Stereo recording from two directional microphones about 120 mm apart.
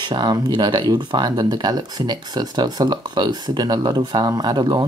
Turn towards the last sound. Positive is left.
turn(degrees=-35)  # may be behind; listen again after turning